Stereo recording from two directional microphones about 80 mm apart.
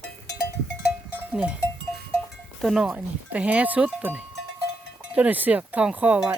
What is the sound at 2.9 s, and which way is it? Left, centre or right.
Speech, centre.